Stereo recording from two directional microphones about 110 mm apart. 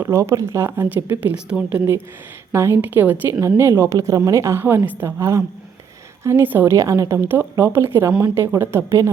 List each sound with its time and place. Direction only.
0.0 s speech: 25° right (ahead or behind); by 1.8 s 10° right (ahead or behind)
2.5 s speech: 25° right (ahead or behind)
6.7 s speech: 30° right (ahead or behind)